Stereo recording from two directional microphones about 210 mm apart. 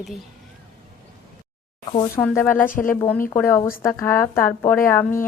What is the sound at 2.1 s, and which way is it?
Speech, 10° left (ahead or behind).